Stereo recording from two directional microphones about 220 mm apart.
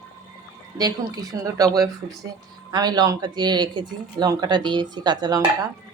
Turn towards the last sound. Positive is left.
turn(degrees=-20)  # may be behind; listen again after turning